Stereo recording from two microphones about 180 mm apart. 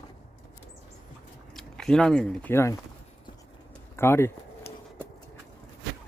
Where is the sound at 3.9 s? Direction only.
15° left (ahead or behind).